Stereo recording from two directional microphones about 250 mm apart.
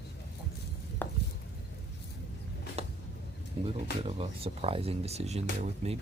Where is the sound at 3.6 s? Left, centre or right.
Right.